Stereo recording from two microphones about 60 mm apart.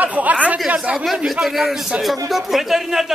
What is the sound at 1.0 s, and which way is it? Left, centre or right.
A man's voice, centre.